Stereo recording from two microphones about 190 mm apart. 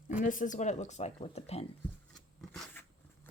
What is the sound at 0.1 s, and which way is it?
Speech, 45° left (ahead or behind).